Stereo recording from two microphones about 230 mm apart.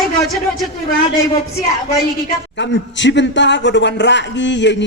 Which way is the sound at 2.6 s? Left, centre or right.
Left.